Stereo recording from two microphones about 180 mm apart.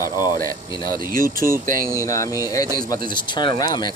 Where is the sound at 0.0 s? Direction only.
20° left (ahead or behind).